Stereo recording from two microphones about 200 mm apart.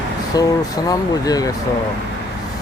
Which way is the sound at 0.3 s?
20° left (ahead or behind).